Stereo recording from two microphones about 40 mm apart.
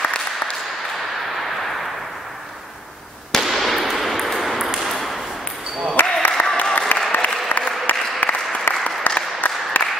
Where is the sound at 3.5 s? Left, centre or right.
Centre.